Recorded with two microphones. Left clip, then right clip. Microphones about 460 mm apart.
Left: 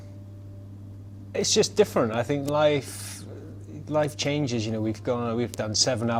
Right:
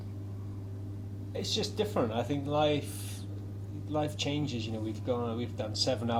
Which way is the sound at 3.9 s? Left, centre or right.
Left.